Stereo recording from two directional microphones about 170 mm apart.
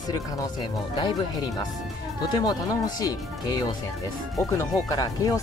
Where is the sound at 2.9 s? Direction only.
20° left (ahead or behind).